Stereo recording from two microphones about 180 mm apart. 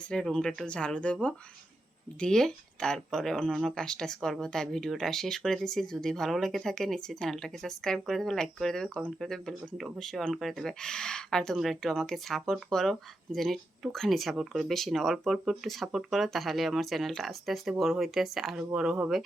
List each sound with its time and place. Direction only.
0.1 s speech: 5° left (ahead or behind)